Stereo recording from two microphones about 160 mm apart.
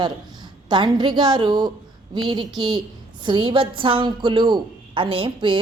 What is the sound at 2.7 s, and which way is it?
A woman's voice, 30° right (ahead or behind).